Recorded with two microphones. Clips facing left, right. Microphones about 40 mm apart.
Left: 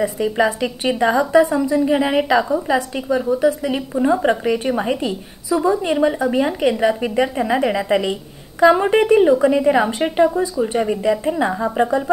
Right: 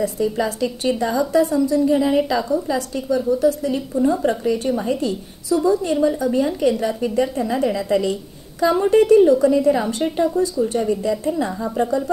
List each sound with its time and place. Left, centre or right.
0.0 s a woman's voice: left
1.9 s a woman's voice: left
3.7 s a woman's voice: left